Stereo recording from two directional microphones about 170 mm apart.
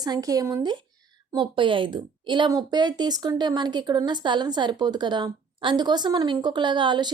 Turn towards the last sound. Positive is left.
turn(degrees=-30)  # may be behind; listen again after turning